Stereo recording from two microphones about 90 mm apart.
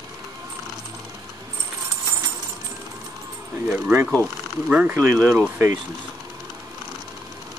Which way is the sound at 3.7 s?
20° right (ahead or behind).